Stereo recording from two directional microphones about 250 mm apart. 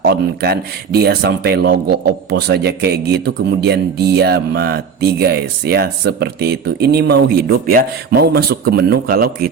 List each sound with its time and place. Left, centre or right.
0.0 s speech: right